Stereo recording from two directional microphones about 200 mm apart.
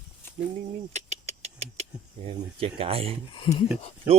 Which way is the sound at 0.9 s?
35° right (ahead or behind).